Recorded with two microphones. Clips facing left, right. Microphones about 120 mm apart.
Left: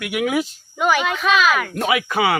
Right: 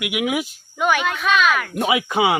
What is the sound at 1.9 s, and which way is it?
Speech, 20° right (ahead or behind).